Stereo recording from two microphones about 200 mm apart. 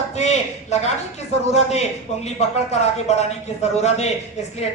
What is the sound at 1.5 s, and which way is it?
Speech, 30° left (ahead or behind).